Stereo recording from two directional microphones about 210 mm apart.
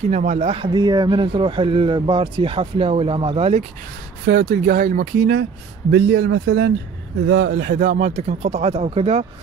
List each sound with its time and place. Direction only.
0.1 s speech: 35° right (ahead or behind)
4.3 s speech: 45° right (ahead or behind); by 9.2 s 30° right (ahead or behind)